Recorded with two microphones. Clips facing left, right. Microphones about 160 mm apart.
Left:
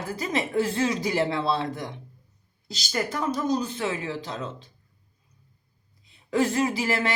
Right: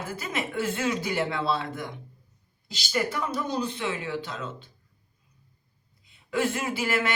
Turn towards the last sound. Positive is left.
turn(degrees=35)  # may be behind; listen again after turning